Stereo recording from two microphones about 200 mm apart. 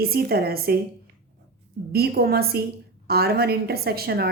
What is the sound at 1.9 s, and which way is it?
Speech, 50° right (ahead or behind).